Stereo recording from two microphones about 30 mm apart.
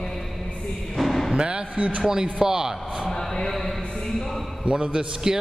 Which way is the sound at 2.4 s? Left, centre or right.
Right.